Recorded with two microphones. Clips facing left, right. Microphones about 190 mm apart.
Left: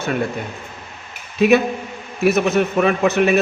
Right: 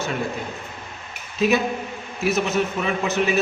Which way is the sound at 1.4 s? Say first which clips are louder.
Left 6 dB; 60° left (ahead or behind).